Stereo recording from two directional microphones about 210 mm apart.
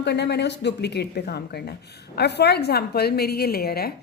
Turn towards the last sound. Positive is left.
turn(degrees=45)  # may be behind; listen again after turning